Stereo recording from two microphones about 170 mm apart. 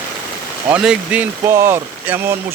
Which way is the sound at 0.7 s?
5° right (ahead or behind).